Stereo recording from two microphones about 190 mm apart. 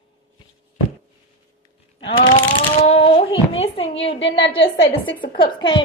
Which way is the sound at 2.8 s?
35° left (ahead or behind).